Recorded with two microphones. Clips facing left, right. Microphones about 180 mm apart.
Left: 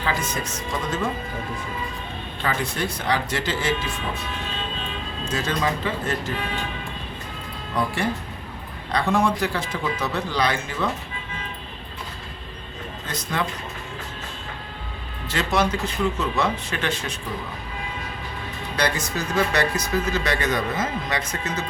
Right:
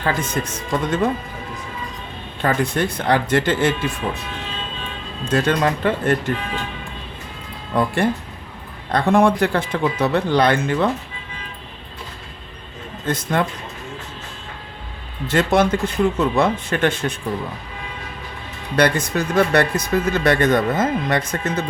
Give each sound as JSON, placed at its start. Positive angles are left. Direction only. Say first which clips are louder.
{"t": 0.0, "sound": "speech", "louder": "right 4 dB", "side_deg": -50}
{"t": 2.4, "sound": "speech", "louder": "right 7 dB", "side_deg": -50}
{"t": 5.3, "sound": "speech", "louder": "right 7 dB", "side_deg": -60}
{"t": 7.7, "sound": "speech", "louder": "right 6 dB", "side_deg": -55}
{"t": 13.1, "sound": "speech", "louder": "right 9 dB", "side_deg": -50}
{"t": 15.3, "sound": "speech", "louder": "right 6 dB", "side_deg": -50}
{"t": 18.8, "sound": "speech", "louder": "right 7 dB", "side_deg": -55}